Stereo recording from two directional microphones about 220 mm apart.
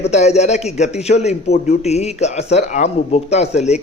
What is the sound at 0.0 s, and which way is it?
A man's voice, 30° left (ahead or behind).